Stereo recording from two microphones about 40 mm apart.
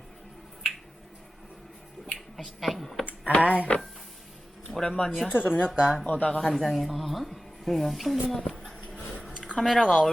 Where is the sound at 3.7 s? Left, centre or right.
Left.